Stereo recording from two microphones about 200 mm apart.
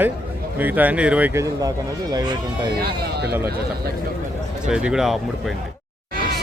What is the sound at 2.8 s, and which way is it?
Speech, 55° right (ahead or behind).